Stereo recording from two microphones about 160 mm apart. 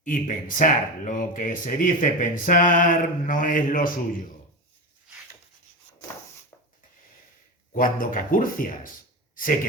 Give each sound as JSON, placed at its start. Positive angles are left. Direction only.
{"t": 0.0, "sound": "speech", "side_deg": 55}
{"t": 7.7, "sound": "speech", "side_deg": 60}
{"t": 9.3, "sound": "a sound", "side_deg": 60}